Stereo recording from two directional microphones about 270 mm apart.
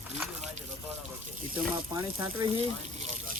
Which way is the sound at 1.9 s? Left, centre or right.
Centre.